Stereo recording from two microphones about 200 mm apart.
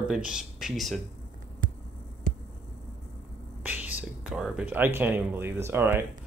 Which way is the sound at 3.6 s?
10° right (ahead or behind).